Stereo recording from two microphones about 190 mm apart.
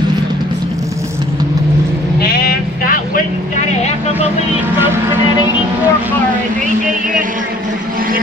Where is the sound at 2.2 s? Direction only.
50° left (ahead or behind).